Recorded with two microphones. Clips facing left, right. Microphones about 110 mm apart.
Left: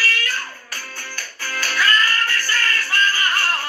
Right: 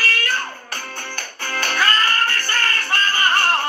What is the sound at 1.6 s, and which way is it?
Music, 60° right (ahead or behind).